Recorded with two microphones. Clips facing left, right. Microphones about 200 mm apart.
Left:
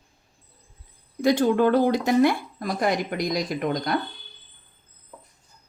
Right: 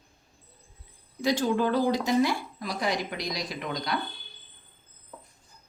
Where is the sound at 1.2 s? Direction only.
55° left (ahead or behind).